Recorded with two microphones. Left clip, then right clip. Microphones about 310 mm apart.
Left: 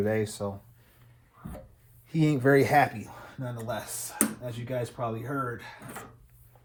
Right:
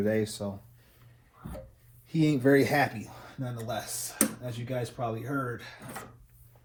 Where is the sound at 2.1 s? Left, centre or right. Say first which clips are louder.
Left 1 dB; left.